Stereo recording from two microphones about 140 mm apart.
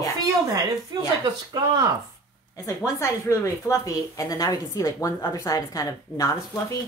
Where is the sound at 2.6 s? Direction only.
20° left (ahead or behind).